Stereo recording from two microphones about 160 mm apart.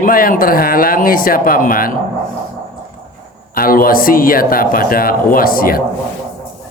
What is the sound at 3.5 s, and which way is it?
A man's voice, 65° left (ahead or behind).